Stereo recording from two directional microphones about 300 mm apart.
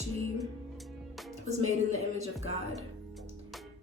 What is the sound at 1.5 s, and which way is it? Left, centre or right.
A woman's voice, right.